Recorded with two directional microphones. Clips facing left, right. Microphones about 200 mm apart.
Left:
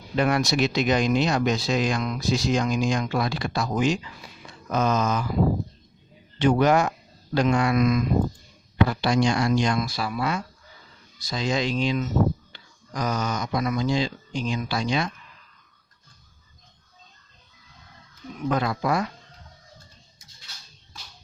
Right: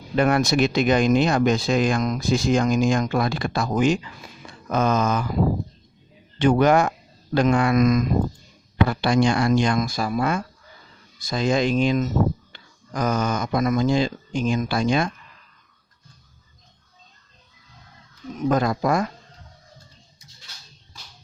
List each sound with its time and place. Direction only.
0.2 s speech: 50° right (ahead or behind)
6.4 s speech: 50° right (ahead or behind)
8.9 s speech: 55° right (ahead or behind)
18.3 s speech: 45° right (ahead or behind)